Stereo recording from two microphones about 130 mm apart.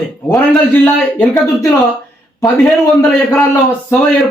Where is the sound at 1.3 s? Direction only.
25° left (ahead or behind).